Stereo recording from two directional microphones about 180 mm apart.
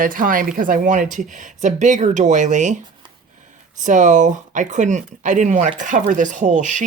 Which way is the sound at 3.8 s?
45° right (ahead or behind).